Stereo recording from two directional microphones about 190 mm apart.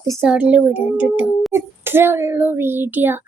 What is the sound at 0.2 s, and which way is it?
A child's voice, 5° right (ahead or behind).